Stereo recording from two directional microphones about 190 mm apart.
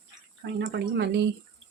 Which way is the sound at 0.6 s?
65° right (ahead or behind).